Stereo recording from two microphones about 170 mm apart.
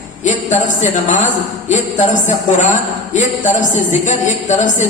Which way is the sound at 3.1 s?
45° left (ahead or behind).